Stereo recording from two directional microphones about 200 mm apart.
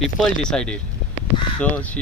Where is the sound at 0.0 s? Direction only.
5° left (ahead or behind).